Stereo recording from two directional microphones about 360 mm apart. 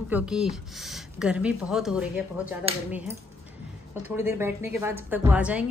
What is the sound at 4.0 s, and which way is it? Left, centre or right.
A woman's voice, centre.